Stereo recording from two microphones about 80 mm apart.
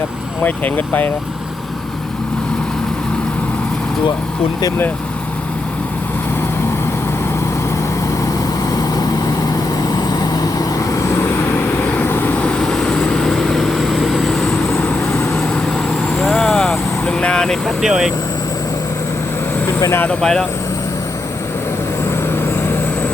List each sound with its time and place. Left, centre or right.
0.4 s speech: left
8.7 s vehicle: left; by 14.8 s centre
16.1 s vehicle: centre
17.8 s speech: centre
19.6 s vehicle: left
20.1 s speech: centre